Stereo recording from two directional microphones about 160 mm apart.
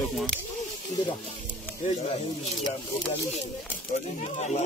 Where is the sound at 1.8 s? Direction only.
45° left (ahead or behind).